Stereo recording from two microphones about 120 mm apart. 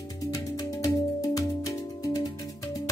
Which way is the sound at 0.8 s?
30° left (ahead or behind).